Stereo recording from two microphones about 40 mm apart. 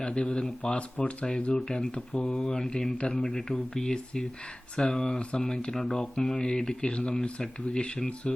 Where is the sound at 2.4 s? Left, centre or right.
Centre.